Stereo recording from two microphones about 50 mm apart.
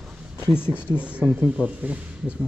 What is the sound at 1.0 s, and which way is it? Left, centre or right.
A man's voice, right.